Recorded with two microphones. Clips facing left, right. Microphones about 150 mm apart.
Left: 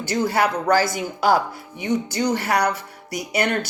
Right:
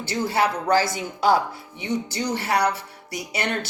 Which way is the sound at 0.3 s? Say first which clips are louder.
Left 1 dB; 30° right (ahead or behind).